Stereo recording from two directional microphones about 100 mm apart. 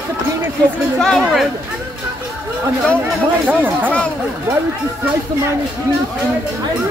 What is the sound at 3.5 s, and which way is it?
Speech, 20° right (ahead or behind).